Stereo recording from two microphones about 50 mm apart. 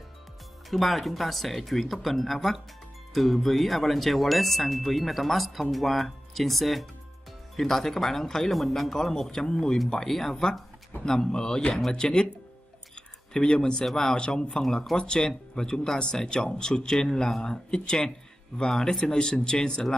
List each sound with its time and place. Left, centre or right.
0.7 s speech: centre
12.9 s a sound: centre
13.8 s speech: centre